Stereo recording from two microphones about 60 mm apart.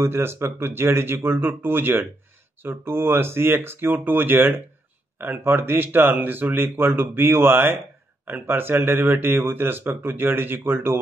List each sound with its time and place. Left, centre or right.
0.0 s speech: right